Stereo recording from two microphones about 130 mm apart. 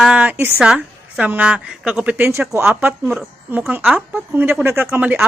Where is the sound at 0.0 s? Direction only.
10° right (ahead or behind).